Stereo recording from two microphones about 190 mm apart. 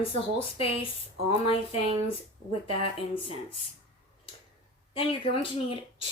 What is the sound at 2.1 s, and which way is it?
Speech, 30° left (ahead or behind).